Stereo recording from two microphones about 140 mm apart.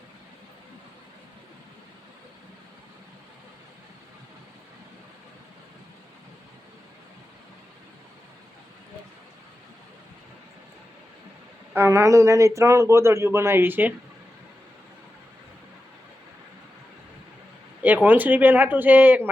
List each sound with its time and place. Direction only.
11.7 s a man's voice: 15° right (ahead or behind)
17.8 s speech: 10° right (ahead or behind)